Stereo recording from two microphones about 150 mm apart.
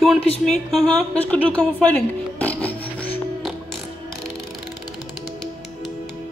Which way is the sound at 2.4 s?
10° left (ahead or behind).